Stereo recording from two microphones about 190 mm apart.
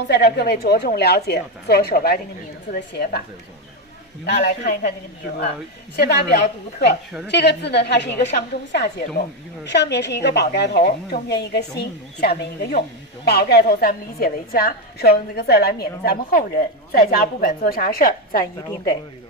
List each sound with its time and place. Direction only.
0.1 s a woman's voice: 60° left (ahead or behind)
4.3 s a woman's voice: 55° left (ahead or behind)
5.9 s a woman's voice: 60° left (ahead or behind)